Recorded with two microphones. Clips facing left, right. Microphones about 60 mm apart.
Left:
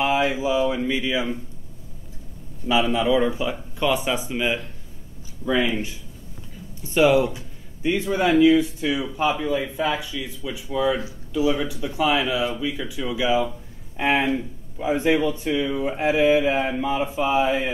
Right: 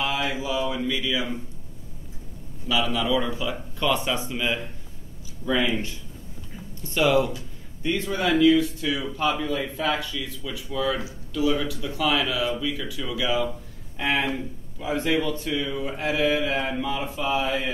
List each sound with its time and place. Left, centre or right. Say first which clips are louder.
0.0 s a man's voice: left 6 dB; left
2.7 s a man's voice: left 4 dB; left